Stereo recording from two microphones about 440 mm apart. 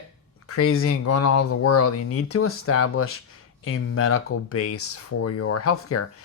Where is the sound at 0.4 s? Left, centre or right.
Left.